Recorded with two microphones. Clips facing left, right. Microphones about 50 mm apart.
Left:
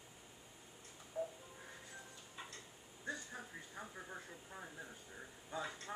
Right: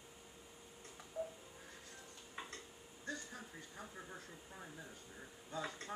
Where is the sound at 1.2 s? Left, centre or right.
Centre.